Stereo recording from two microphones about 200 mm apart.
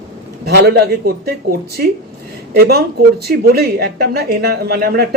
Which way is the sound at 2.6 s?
50° right (ahead or behind).